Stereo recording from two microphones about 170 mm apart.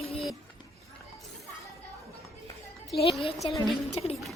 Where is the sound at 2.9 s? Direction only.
Centre (ahead or behind).